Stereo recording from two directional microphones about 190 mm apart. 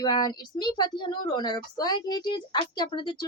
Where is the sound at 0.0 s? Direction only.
20° left (ahead or behind).